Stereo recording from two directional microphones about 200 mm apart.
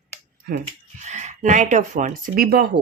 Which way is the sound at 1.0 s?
35° right (ahead or behind).